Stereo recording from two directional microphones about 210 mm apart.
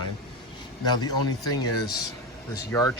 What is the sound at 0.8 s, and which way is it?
Speech, 20° left (ahead or behind).